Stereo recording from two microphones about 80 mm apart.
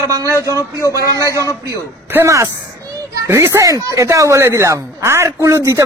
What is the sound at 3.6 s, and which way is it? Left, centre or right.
Speech, right.